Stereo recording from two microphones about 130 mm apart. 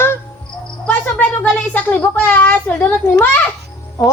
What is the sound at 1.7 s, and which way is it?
Speech, 15° left (ahead or behind).